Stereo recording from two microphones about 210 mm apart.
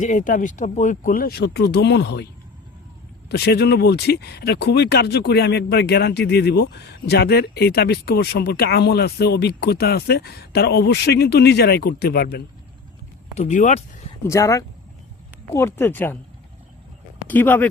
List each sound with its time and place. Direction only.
0.0 s speech: 40° left (ahead or behind)
13.3 s speech: 35° left (ahead or behind)
14.3 s speech: 15° left (ahead or behind)
17.2 s speech: 10° left (ahead or behind)